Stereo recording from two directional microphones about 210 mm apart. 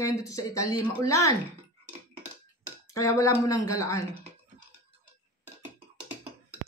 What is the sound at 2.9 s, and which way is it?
Speech, 15° left (ahead or behind).